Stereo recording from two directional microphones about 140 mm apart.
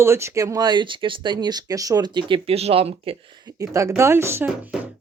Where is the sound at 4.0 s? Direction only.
20° right (ahead or behind).